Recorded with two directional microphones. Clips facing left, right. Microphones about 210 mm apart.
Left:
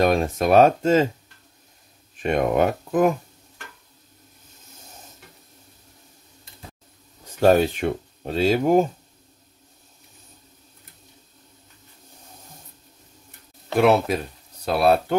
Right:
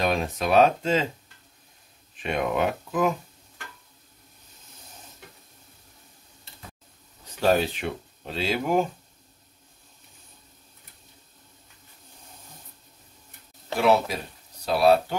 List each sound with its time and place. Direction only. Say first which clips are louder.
0.0 s speech: left 6 dB; 45° left (ahead or behind)
2.1 s speech: left 6 dB; 45° left (ahead or behind)
7.3 s speech: left 6 dB; 50° left (ahead or behind)
13.7 s speech: left 4 dB; 60° left (ahead or behind)